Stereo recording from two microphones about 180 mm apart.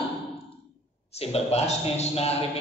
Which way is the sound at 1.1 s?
35° left (ahead or behind).